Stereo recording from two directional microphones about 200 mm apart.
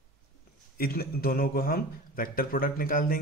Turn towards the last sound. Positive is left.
turn(degrees=45)  # may be behind; listen again after turning